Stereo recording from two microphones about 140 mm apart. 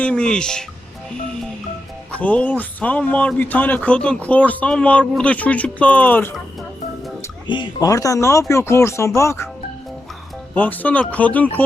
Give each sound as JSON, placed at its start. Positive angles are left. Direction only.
{"t": 0.0, "sound": "speech", "side_deg": 5}
{"t": 2.1, "sound": "speech", "side_deg": 10}
{"t": 7.4, "sound": "speech", "side_deg": 35}
{"t": 10.5, "sound": "speech", "side_deg": 10}